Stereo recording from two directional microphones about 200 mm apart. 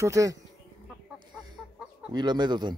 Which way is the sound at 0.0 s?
15° right (ahead or behind).